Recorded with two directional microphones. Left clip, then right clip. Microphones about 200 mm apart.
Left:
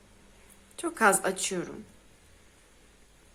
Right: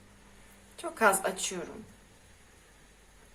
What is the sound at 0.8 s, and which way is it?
Speech, 45° left (ahead or behind).